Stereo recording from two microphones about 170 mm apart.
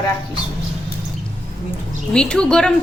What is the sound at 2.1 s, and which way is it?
Speech, 5° left (ahead or behind).